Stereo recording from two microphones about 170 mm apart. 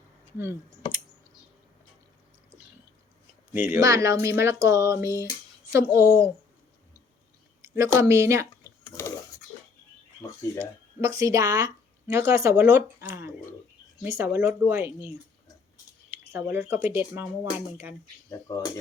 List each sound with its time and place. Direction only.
3.5 s speech: 15° right (ahead or behind)
7.8 s speech: 15° right (ahead or behind)
8.6 s a sound: 15° left (ahead or behind)
10.2 s speech: 15° left (ahead or behind)
11.0 s speech: 20° right (ahead or behind)
16.1 s speech: 15° right (ahead or behind)
18.3 s speech: 20° left (ahead or behind)